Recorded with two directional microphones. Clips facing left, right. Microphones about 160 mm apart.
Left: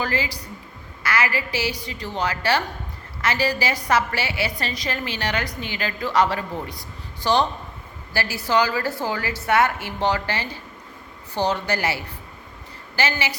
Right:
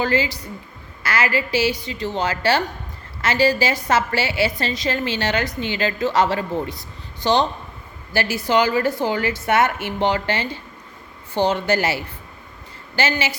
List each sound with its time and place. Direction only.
0.0 s a woman's voice: 25° right (ahead or behind)
13.0 s a woman's voice: 25° right (ahead or behind)